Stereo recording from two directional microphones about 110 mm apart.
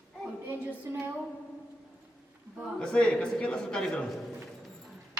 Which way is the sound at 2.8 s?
10° left (ahead or behind).